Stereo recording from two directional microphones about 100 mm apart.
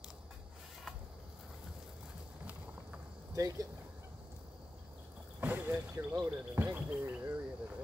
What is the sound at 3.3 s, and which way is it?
Speech, 35° right (ahead or behind).